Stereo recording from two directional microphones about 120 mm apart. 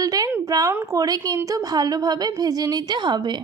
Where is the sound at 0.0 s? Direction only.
30° right (ahead or behind).